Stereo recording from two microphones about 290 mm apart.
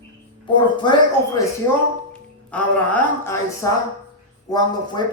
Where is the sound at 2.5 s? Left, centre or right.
Centre.